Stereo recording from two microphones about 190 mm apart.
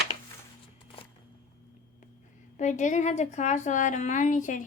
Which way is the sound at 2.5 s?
40° left (ahead or behind).